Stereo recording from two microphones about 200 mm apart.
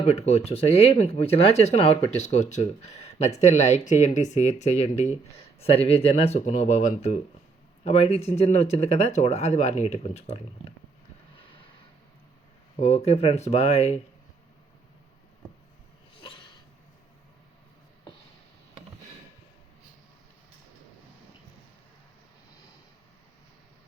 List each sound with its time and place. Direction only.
0.0 s speech: 35° left (ahead or behind)
13.1 s speech: 30° left (ahead or behind)
16.2 s a sound: 25° left (ahead or behind)